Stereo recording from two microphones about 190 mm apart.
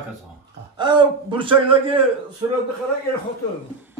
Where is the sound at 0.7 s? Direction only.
25° right (ahead or behind).